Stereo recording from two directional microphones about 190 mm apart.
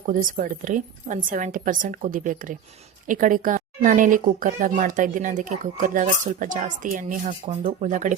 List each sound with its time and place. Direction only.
0.0 s speech: 45° right (ahead or behind)